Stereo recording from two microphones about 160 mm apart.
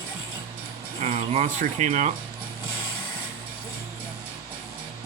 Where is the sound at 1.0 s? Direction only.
40° right (ahead or behind).